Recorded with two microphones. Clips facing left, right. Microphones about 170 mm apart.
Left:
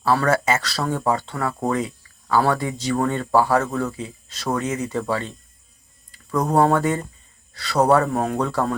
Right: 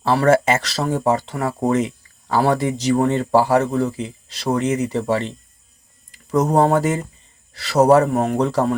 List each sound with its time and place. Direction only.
0.0 s speech: 25° right (ahead or behind)
6.3 s speech: 20° right (ahead or behind)